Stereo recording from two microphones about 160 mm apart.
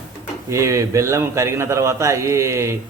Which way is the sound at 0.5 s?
20° right (ahead or behind).